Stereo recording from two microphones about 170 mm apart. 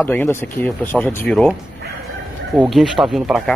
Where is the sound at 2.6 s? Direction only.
Centre (ahead or behind).